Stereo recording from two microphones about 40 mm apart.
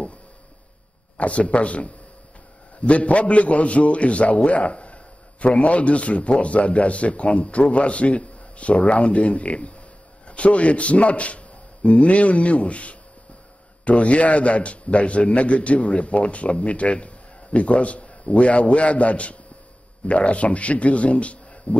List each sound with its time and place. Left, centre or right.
1.1 s a man's voice: left